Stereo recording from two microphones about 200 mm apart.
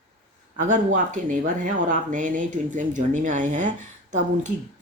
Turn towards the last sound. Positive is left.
turn(degrees=-40)  # may be behind; listen again after turning